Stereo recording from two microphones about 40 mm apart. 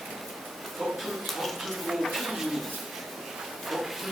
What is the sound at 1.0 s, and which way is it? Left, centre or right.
Speech, centre.